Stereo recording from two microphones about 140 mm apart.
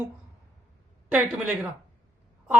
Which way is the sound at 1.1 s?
5° right (ahead or behind).